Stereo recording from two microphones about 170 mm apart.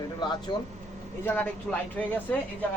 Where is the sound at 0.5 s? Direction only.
25° left (ahead or behind).